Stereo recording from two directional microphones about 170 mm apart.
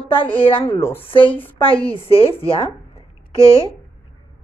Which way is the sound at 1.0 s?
30° left (ahead or behind).